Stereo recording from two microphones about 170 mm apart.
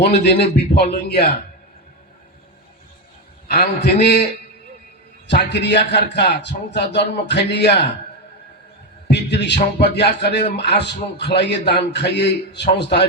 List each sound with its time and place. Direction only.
0.0 s a man's voice: 75° left (ahead or behind)
3.5 s a man's voice: 75° left (ahead or behind)
5.3 s a man's voice: 90° left
9.0 s a man's voice: 85° left